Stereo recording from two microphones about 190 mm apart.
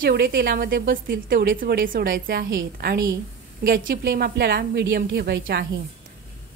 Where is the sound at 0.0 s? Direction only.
50° right (ahead or behind).